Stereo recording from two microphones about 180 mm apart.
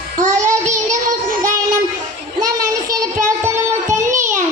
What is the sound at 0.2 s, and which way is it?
Child singing, 45° right (ahead or behind).